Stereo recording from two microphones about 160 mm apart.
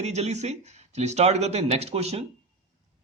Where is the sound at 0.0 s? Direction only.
45° right (ahead or behind).